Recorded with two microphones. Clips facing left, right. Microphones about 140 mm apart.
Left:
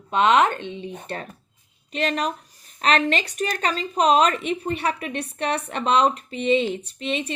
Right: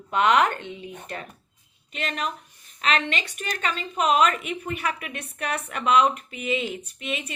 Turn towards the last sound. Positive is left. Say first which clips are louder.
# left 5 dB
turn(degrees=30)  # may be behind; listen again after turning